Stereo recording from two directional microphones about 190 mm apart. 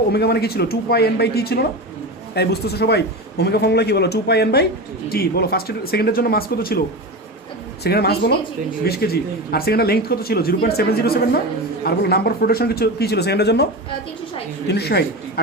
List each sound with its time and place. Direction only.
0.1 s speech: 55° left (ahead or behind)
7.9 s speech: 55° left (ahead or behind)
14.7 s speech: 60° left (ahead or behind)